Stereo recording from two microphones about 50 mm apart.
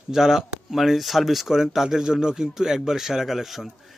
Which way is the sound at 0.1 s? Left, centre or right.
Centre.